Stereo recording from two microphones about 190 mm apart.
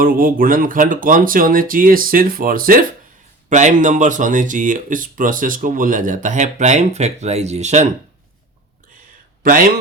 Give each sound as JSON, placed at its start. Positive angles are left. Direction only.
{"t": 0.0, "sound": "speech", "side_deg": -50}
{"t": 9.4, "sound": "speech", "side_deg": -45}